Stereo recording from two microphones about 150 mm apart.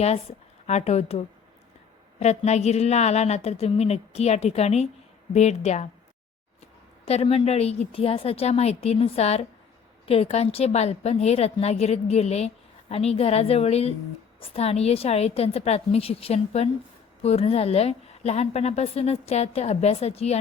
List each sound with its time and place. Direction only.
0.0 s a woman's voice: 45° left (ahead or behind)
7.1 s a woman's voice: 40° left (ahead or behind)